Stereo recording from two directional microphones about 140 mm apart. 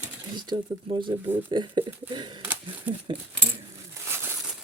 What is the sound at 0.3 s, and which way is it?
Speech, 35° right (ahead or behind).